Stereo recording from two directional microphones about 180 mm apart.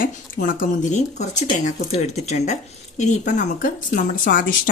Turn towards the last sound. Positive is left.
turn(degrees=50)  # may be behind; listen again after turning